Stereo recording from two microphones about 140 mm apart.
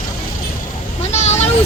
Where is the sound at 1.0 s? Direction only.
55° left (ahead or behind).